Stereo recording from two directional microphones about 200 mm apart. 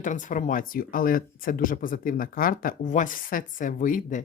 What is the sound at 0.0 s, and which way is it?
Speech, 40° left (ahead or behind).